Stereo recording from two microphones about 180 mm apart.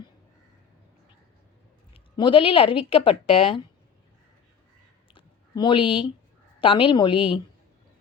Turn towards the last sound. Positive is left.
turn(degrees=30)  # may be behind; listen again after turning